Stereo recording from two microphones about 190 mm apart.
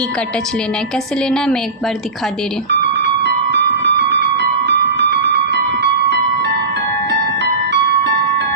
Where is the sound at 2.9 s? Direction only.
65° right (ahead or behind).